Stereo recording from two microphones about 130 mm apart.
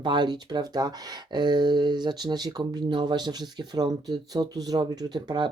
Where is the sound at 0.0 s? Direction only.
35° right (ahead or behind).